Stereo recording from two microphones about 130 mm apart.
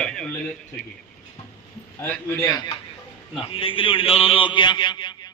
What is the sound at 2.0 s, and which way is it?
Speech, 15° left (ahead or behind).